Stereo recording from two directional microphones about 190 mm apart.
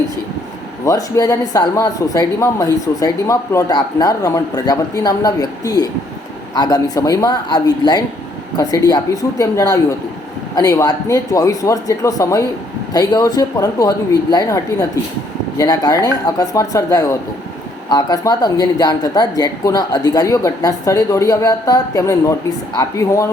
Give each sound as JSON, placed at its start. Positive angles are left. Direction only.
{"t": 0.9, "sound": "a man's voice", "side_deg": 15}